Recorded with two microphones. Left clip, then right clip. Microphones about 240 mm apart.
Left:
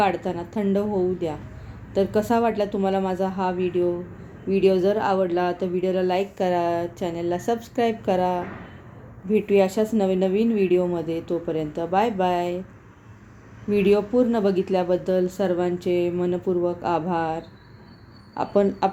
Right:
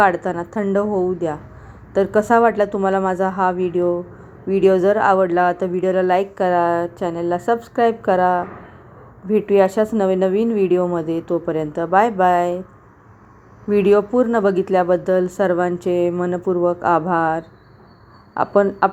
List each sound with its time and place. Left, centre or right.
0.0 s speech: right
13.7 s speech: right